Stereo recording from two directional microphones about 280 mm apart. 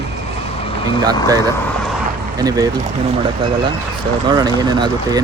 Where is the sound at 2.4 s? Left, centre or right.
Centre.